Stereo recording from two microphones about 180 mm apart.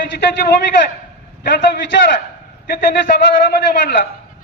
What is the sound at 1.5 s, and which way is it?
A man's voice, 75° left (ahead or behind).